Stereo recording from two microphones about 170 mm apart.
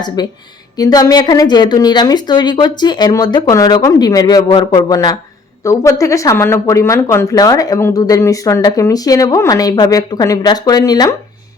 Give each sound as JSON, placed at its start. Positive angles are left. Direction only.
{"t": 0.2, "sound": "speech", "side_deg": 25}